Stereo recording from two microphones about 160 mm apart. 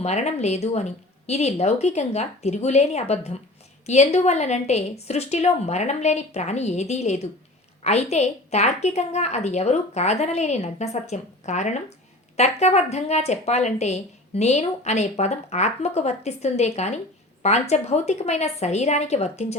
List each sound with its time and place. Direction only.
0.0 s speech: 45° left (ahead or behind)